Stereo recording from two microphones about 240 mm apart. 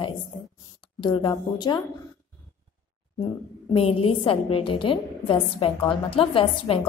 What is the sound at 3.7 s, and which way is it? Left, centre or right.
A woman's voice, left.